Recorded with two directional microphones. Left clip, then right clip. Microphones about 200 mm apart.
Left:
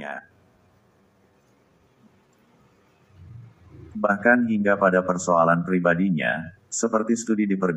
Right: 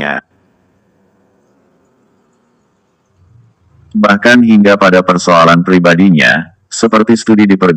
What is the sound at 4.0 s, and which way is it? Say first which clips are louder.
A man's voice: right 12 dB; 40° right (ahead or behind).